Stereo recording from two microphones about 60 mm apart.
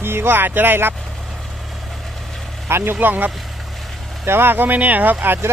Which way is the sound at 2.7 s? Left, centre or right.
Right.